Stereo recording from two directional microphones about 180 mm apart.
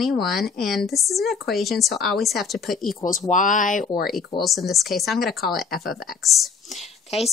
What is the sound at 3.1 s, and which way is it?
Speech, 45° left (ahead or behind).